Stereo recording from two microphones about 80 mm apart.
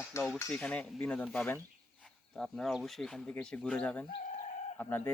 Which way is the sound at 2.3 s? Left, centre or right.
Centre.